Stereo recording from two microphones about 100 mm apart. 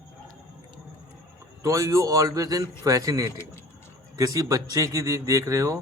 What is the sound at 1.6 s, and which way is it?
A man's voice, 35° right (ahead or behind).